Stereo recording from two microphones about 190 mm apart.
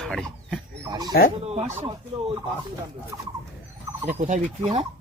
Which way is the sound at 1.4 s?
35° right (ahead or behind).